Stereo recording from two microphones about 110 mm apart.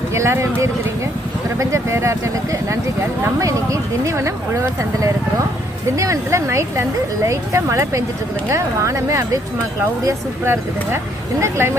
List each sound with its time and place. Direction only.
0.1 s speech: 25° right (ahead or behind)